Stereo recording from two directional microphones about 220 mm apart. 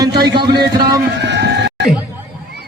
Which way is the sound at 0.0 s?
20° right (ahead or behind).